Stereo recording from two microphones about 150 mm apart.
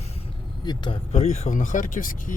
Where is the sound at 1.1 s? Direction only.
45° left (ahead or behind); by 2.3 s 60° left (ahead or behind).